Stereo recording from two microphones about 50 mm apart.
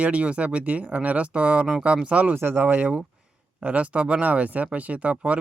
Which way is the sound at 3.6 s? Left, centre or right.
Right.